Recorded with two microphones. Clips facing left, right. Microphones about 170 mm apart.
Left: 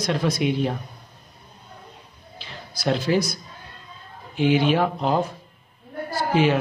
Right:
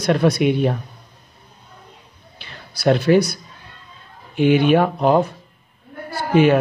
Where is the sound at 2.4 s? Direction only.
60° right (ahead or behind).